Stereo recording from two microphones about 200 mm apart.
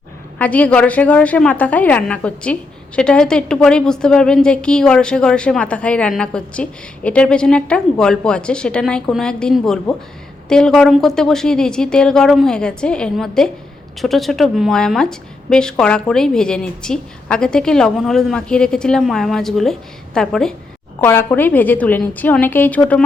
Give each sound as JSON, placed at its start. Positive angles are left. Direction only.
{"t": 0.3, "sound": "a woman's voice", "side_deg": 10}